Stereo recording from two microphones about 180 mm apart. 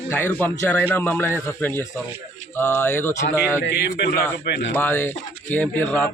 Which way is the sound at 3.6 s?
65° left (ahead or behind).